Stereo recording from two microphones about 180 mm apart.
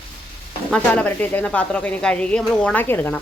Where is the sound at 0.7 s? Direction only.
10° left (ahead or behind).